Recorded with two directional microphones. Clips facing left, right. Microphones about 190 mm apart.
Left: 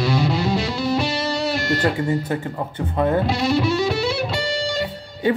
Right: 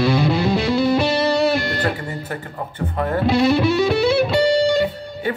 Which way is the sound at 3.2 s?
60° right (ahead or behind).